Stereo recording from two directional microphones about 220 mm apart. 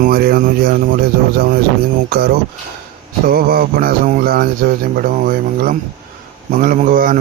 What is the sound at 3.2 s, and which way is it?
A man's voice, 40° right (ahead or behind).